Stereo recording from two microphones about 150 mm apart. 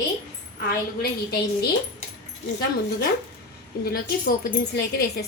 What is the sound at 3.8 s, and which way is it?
A woman's voice, 90° left.